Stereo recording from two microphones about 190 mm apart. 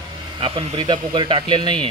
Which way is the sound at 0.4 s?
25° right (ahead or behind).